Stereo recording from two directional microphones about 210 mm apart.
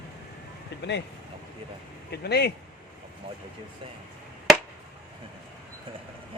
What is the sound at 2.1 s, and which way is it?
Speech, 50° left (ahead or behind).